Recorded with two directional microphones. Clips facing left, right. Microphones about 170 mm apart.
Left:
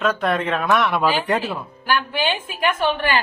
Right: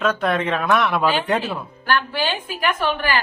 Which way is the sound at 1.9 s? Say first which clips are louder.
Even; 15° left (ahead or behind).